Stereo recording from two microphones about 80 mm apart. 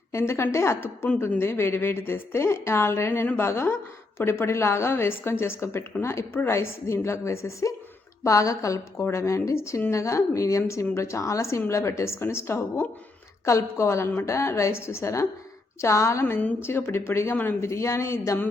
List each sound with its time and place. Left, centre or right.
0.1 s speech: left
16.2 s a woman's voice: left